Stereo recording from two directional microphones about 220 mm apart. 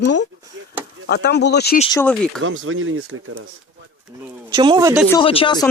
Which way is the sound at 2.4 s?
65° right (ahead or behind).